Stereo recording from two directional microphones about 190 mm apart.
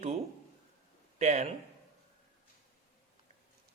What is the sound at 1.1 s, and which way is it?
Speech, 35° right (ahead or behind).